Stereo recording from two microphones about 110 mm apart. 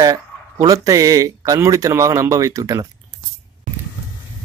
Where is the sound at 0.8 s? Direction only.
30° right (ahead or behind).